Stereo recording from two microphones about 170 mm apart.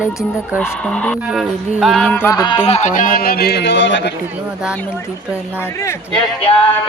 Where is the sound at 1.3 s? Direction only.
Centre (ahead or behind); by 4.1 s 90° left.